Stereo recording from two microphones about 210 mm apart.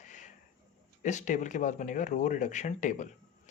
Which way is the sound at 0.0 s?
35° left (ahead or behind).